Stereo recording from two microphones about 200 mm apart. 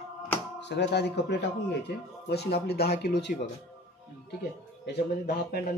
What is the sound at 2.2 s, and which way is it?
Speech, 55° left (ahead or behind).